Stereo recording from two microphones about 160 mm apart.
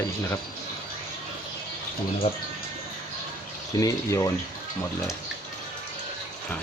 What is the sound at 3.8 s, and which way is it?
Speech, 20° left (ahead or behind).